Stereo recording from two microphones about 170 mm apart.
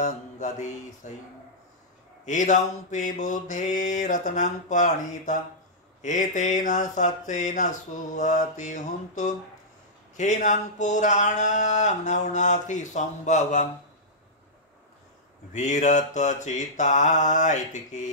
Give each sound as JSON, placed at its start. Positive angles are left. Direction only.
{"t": 0.0, "sound": "speech", "side_deg": 45}
{"t": 2.2, "sound": "speech", "side_deg": 45}
{"t": 15.5, "sound": "speech", "side_deg": 45}